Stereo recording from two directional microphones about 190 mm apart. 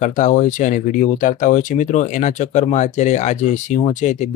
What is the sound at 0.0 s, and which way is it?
Speech, 40° left (ahead or behind).